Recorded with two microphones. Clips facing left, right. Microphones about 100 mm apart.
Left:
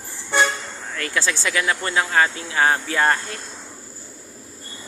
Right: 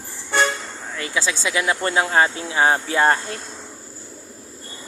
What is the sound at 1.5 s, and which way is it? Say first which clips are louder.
Speech: right 3 dB; 20° right (ahead or behind).